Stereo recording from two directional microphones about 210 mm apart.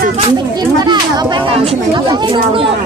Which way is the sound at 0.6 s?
20° right (ahead or behind).